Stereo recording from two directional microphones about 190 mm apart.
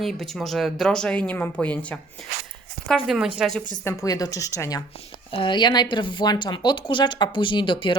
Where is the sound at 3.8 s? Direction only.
15° left (ahead or behind).